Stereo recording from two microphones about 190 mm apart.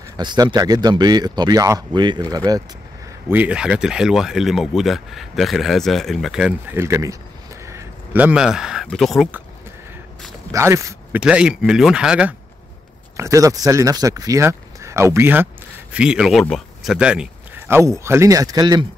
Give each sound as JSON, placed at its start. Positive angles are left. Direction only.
{"t": 0.2, "sound": "speech", "side_deg": -25}
{"t": 3.3, "sound": "speech", "side_deg": -10}
{"t": 7.6, "sound": "a sound", "side_deg": -10}
{"t": 8.8, "sound": "speech", "side_deg": 0}
{"t": 10.5, "sound": "speech", "side_deg": -15}
{"t": 13.2, "sound": "speech", "side_deg": -15}